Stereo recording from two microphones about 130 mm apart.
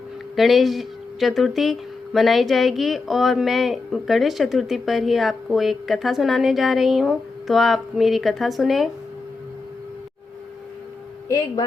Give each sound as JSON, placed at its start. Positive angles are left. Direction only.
{"t": 0.3, "sound": "speech", "side_deg": 0}
{"t": 11.3, "sound": "a man's voice", "side_deg": 30}